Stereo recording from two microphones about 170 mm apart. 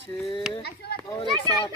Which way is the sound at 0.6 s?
70° left (ahead or behind).